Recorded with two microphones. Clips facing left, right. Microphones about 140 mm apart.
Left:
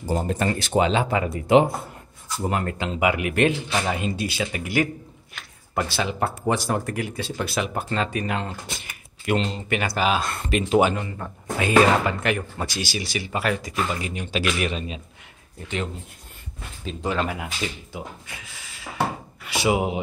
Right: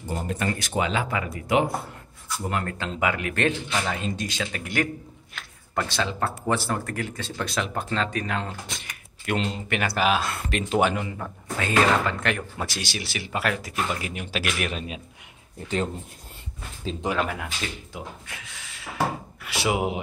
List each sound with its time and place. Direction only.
0.0 s speech: 30° left (ahead or behind); by 4.8 s 10° left (ahead or behind)
5.4 s a sound: centre (ahead or behind)
5.8 s speech: 10° left (ahead or behind)
17.0 s speech: 10° right (ahead or behind)
17.3 s speech: 5° left (ahead or behind)